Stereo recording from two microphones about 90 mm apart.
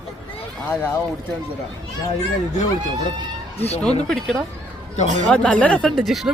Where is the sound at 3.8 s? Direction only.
5° left (ahead or behind).